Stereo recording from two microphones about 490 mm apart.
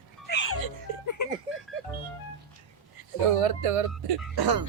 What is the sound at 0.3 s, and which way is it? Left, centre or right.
Music, left.